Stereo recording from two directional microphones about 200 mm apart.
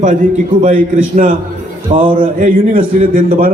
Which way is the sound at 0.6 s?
40° right (ahead or behind).